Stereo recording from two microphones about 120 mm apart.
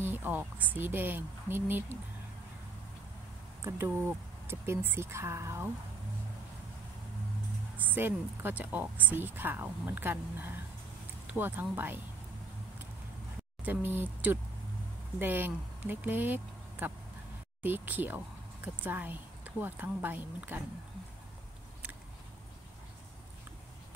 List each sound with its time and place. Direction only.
0.0 s a woman's voice: 15° right (ahead or behind)
3.6 s speech: 20° right (ahead or behind)
7.7 s a woman's voice: 15° right (ahead or behind)
13.7 s a woman's voice: 15° right (ahead or behind)